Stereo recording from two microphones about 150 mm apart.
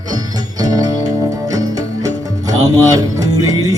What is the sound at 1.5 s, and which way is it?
Music, 25° right (ahead or behind).